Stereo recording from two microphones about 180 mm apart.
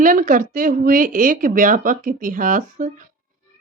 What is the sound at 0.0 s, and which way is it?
Speech, 50° right (ahead or behind).